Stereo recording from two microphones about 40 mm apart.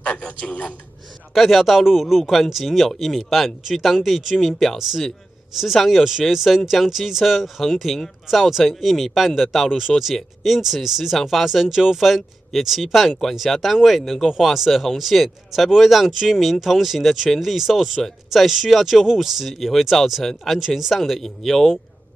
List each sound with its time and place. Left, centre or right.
0.0 s a man's voice: left
1.3 s speech: centre